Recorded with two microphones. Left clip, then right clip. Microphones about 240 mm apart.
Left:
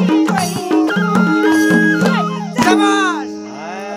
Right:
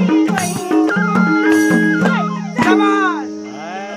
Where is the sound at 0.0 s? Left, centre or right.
Left.